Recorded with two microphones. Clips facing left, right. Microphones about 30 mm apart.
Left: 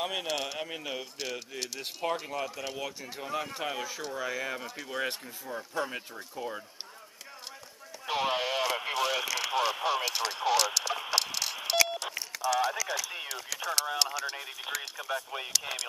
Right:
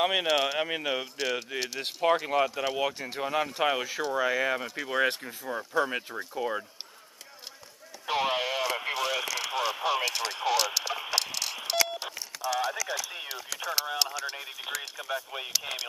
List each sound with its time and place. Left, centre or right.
0.0 s speech: right
0.3 s speech: centre
0.6 s speech: right
2.2 s speech: right
8.1 s radio: centre
12.5 s clip-clop: centre
13.0 s a sound: centre
13.5 s speech: centre